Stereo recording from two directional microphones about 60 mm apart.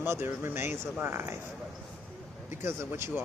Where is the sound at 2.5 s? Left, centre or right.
Right.